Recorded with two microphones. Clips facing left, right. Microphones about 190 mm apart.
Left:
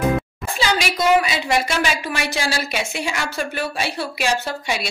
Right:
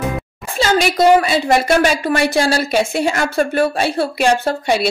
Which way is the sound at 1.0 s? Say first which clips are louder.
Right 5 dB; 45° right (ahead or behind).